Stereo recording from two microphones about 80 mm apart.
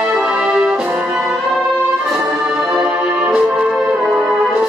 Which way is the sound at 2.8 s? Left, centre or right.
Centre.